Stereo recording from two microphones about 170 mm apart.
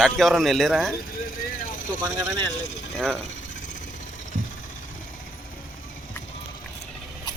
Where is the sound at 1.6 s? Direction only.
50° left (ahead or behind).